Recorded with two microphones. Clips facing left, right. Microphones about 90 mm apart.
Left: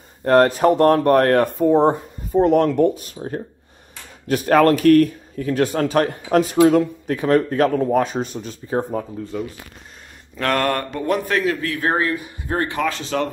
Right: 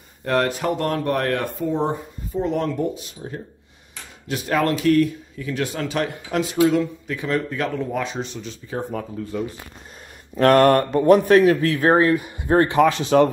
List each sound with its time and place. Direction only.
0.2 s speech: 40° left (ahead or behind)
10.5 s speech: 30° right (ahead or behind)